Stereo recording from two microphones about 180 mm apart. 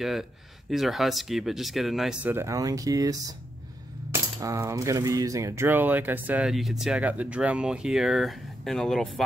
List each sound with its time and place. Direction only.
0.0 s speech: centre (ahead or behind)
2.3 s speech: 20° right (ahead or behind)
4.1 s coin: 15° right (ahead or behind); by 9.2 s centre (ahead or behind)